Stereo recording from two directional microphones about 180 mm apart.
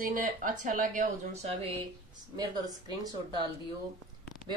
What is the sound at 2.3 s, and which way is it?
Speech, 20° right (ahead or behind).